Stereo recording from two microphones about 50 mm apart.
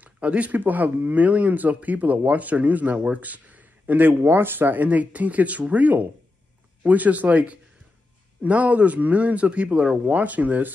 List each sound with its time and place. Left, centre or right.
0.0 s speech: right